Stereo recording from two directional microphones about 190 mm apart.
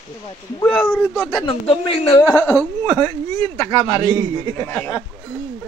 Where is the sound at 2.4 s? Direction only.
10° left (ahead or behind).